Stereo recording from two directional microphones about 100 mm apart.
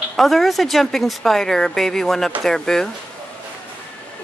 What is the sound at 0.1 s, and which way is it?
Speech, centre (ahead or behind).